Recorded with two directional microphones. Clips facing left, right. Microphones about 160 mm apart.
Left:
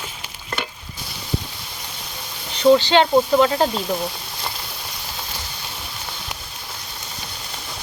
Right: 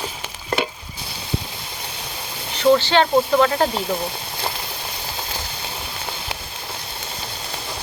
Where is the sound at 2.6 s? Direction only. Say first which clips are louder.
Left 2 dB; 15° left (ahead or behind).